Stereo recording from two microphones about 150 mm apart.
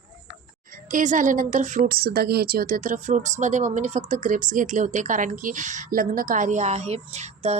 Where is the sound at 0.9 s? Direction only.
60° right (ahead or behind).